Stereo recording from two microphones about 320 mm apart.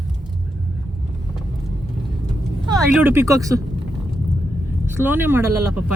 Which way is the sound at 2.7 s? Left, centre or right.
Centre.